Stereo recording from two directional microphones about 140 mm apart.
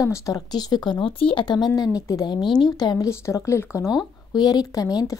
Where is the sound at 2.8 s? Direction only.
25° left (ahead or behind).